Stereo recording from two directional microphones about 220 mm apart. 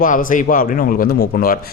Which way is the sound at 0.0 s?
40° left (ahead or behind).